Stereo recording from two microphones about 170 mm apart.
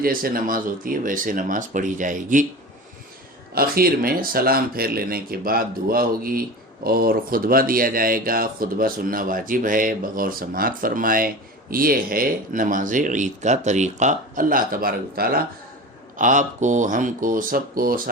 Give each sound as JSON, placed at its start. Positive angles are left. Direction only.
{"t": 0.0, "sound": "speech", "side_deg": -60}
{"t": 3.5, "sound": "speech", "side_deg": -60}
{"t": 16.1, "sound": "speech", "side_deg": -50}